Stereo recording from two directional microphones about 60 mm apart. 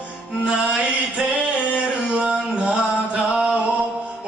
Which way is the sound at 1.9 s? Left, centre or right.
Centre.